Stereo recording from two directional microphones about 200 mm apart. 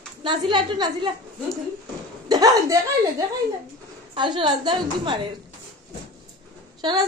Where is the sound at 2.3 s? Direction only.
20° right (ahead or behind).